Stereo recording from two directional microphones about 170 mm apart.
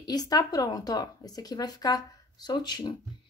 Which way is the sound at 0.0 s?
20° left (ahead or behind).